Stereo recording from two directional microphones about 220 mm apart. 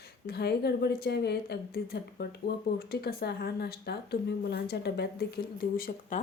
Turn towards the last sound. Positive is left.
turn(degrees=40)  # may be behind; listen again after turning